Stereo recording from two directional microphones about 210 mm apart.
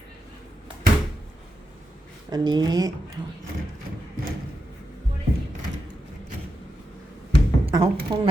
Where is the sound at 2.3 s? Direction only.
20° right (ahead or behind).